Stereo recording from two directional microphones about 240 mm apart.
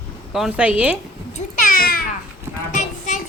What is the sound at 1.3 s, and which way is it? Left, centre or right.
Cat, left.